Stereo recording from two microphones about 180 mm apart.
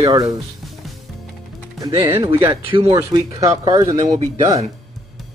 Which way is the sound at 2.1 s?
15° right (ahead or behind).